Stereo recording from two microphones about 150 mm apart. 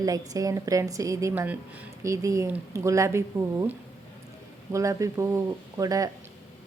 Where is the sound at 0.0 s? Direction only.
25° right (ahead or behind).